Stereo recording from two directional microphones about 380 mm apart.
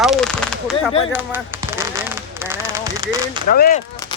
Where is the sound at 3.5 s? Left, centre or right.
Left.